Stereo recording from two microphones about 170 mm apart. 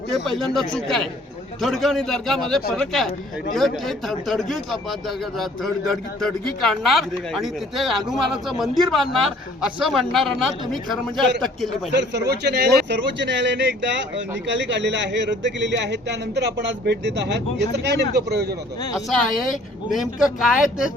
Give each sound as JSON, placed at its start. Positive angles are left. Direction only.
{"t": 0.3, "sound": "speech", "side_deg": 0}
{"t": 11.9, "sound": "a man's voice", "side_deg": -90}
{"t": 18.9, "sound": "speech", "side_deg": 0}